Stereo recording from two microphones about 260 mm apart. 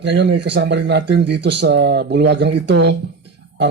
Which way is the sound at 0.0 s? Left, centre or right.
Right.